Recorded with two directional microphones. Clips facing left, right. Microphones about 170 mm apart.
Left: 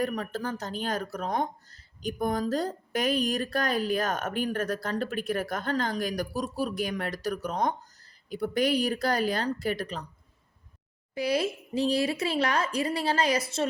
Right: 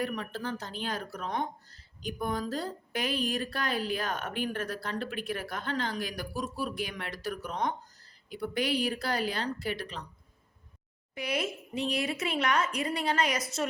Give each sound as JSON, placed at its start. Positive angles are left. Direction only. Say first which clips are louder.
{"t": 0.0, "sound": "speech", "louder": "left 4 dB", "side_deg": 40}
{"t": 11.1, "sound": "speech", "louder": "left 6 dB", "side_deg": 35}